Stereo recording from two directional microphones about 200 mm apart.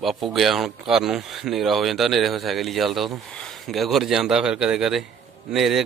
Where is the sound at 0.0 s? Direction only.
Centre (ahead or behind).